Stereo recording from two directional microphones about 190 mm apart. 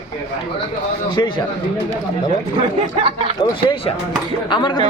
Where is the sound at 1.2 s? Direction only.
20° left (ahead or behind).